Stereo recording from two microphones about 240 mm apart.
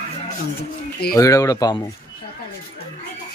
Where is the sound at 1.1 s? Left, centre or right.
Centre.